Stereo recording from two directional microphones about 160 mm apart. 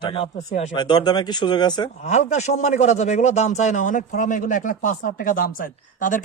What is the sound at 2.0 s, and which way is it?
A man's voice, 45° left (ahead or behind).